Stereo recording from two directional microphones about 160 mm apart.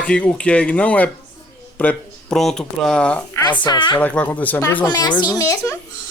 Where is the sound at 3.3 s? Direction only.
25° left (ahead or behind).